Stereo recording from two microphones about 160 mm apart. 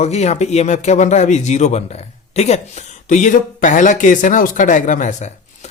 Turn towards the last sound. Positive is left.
turn(degrees=45)  # may be behind; listen again after turning